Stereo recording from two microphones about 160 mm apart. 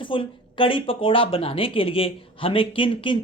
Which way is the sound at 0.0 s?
30° left (ahead or behind).